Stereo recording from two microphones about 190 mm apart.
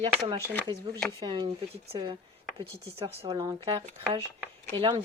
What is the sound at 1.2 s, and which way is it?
Speech, 25° right (ahead or behind).